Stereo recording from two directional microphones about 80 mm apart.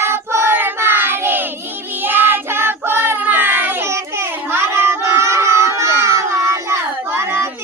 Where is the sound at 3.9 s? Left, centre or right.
Right.